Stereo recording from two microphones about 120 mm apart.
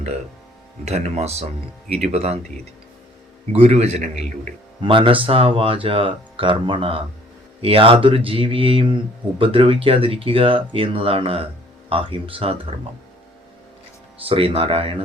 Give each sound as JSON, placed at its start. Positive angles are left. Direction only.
{"t": 0.9, "sound": "a man's voice", "side_deg": -65}
{"t": 3.5, "sound": "a man's voice", "side_deg": -60}
{"t": 4.8, "sound": "speech", "side_deg": -45}
{"t": 14.3, "sound": "speech", "side_deg": -50}